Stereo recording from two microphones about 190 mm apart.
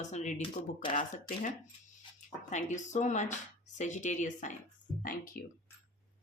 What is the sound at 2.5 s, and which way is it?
A woman's voice, 40° left (ahead or behind).